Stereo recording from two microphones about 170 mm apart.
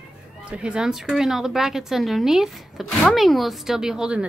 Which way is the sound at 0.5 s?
5° right (ahead or behind).